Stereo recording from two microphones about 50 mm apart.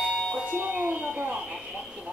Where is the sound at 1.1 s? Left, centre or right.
Right.